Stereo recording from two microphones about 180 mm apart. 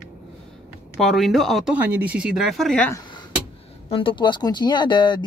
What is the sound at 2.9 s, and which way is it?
Speech, 20° left (ahead or behind).